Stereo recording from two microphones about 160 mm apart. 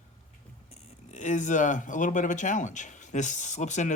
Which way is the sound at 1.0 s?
50° left (ahead or behind).